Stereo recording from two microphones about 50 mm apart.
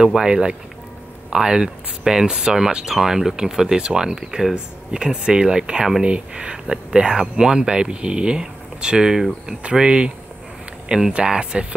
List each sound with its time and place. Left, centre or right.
0.0 s speech: centre
6.0 s speech: right